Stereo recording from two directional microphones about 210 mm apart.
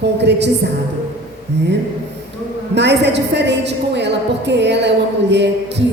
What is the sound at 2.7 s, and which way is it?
A woman's voice, 55° right (ahead or behind).